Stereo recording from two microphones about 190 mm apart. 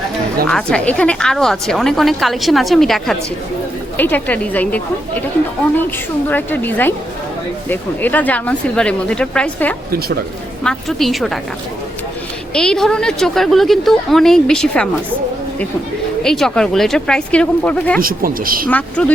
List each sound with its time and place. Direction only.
0.4 s a woman's voice: 5° left (ahead or behind)
6.2 s a woman's voice: 10° left (ahead or behind)
12.5 s a woman's voice: 5° left (ahead or behind)
16.2 s a woman's voice: centre (ahead or behind)
18.0 s speech: 50° right (ahead or behind)
18.7 s speech: 5° left (ahead or behind)